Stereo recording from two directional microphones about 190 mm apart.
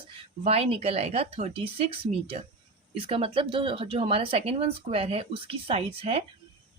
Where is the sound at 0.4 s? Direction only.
30° right (ahead or behind).